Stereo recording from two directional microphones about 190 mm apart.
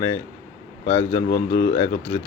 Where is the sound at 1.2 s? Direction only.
45° left (ahead or behind).